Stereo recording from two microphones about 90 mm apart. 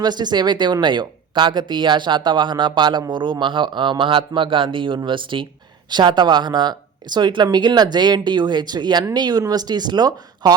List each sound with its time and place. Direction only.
0.0 s speech: 55° right (ahead or behind)
5.9 s speech: 55° right (ahead or behind)